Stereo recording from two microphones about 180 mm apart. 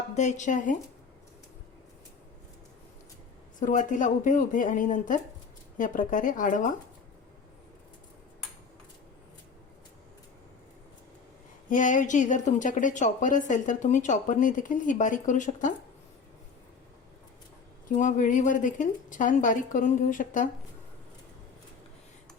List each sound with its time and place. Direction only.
0.1 s a woman's voice: 40° left (ahead or behind)
3.6 s a woman's voice: 45° left (ahead or behind)
11.7 s a woman's voice: 45° left (ahead or behind)
17.8 s a woman's voice: 45° left (ahead or behind)